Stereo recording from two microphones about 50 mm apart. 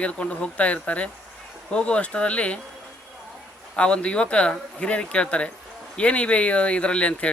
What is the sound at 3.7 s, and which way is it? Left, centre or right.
Speech, left.